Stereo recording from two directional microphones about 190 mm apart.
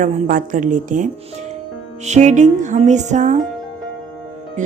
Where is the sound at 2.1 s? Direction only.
40° right (ahead or behind).